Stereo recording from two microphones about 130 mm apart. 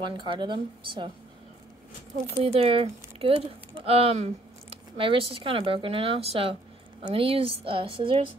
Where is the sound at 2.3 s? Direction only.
45° right (ahead or behind).